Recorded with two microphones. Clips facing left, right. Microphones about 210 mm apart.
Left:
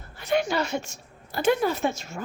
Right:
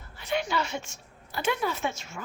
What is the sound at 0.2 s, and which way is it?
A woman's voice, 45° left (ahead or behind).